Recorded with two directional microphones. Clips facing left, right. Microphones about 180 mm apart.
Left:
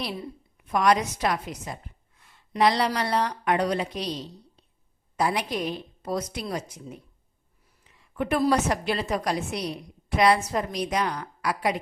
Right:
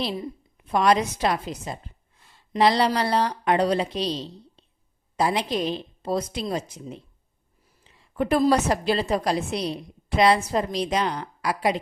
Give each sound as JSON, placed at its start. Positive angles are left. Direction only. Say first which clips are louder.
{"t": 0.0, "sound": "a woman's voice", "louder": "right 4 dB", "side_deg": -25}
{"t": 7.9, "sound": "a sound", "louder": "right 4 dB", "side_deg": -30}
{"t": 8.4, "sound": "a woman's voice", "louder": "right 2 dB", "side_deg": -30}